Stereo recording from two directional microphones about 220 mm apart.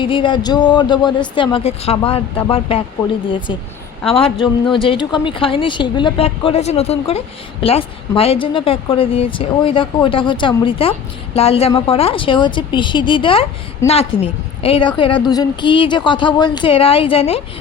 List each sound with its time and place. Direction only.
0.0 s a woman's voice: 20° left (ahead or behind)
4.2 s a woman's voice: 25° left (ahead or behind)